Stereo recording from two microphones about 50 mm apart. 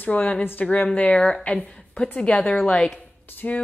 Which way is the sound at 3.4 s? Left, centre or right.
Left.